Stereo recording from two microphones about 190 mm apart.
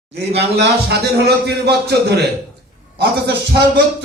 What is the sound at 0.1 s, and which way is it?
Speech, 60° right (ahead or behind).